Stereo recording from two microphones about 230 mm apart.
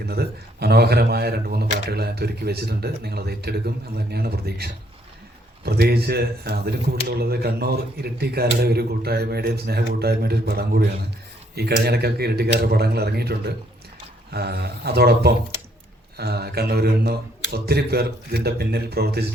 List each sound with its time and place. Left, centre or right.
0.0 s speech: right